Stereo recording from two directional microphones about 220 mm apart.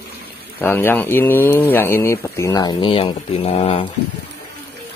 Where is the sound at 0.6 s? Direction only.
10° left (ahead or behind); by 3.8 s 25° left (ahead or behind).